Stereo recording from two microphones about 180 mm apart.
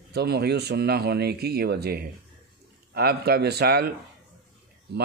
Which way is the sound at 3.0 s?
60° right (ahead or behind).